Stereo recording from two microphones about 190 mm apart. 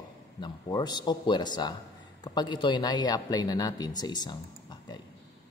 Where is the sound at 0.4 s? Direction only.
20° left (ahead or behind).